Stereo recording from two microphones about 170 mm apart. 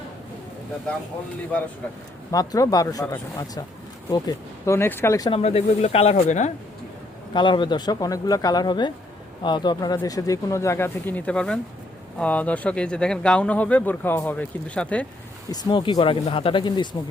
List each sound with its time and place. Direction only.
2.3 s speech: 20° left (ahead or behind)
5.3 s speech: 35° left (ahead or behind)
7.3 s speech: 30° left (ahead or behind); by 15.0 s 5° left (ahead or behind)
15.4 s speech: 25° left (ahead or behind)